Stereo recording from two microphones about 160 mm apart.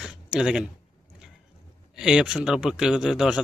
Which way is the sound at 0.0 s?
5° right (ahead or behind).